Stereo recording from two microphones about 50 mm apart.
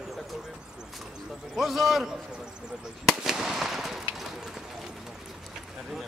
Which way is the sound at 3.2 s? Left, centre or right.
Centre.